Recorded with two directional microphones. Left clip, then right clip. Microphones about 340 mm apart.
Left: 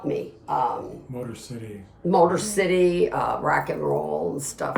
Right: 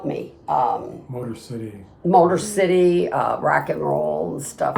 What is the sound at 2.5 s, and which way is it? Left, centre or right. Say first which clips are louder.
Speech: right 4 dB; centre.